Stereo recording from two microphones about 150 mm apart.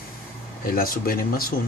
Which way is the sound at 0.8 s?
75° left (ahead or behind).